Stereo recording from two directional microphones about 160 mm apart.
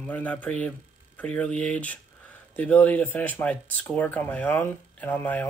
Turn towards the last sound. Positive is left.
turn(degrees=10)  # may be behind; listen again after turning